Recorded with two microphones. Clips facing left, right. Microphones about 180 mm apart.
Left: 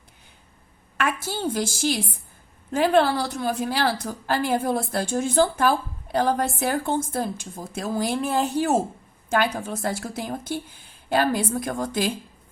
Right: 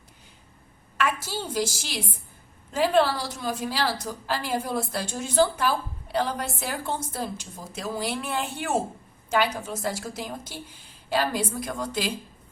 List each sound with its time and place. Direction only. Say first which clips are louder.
1.5 s a woman's voice: left 6 dB; 50° left (ahead or behind)
9.3 s a woman's voice: left 2 dB; 50° left (ahead or behind)